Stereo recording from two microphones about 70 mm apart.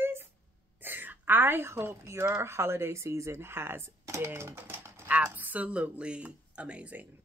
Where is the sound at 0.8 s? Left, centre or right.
Right.